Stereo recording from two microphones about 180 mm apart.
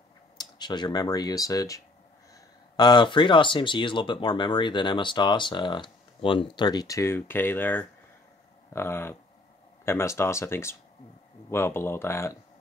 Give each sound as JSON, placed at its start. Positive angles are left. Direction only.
{"t": 0.4, "sound": "speech", "side_deg": 25}
{"t": 2.8, "sound": "speech", "side_deg": 25}